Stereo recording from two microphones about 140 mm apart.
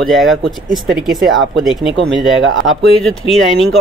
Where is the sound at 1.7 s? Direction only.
Centre (ahead or behind).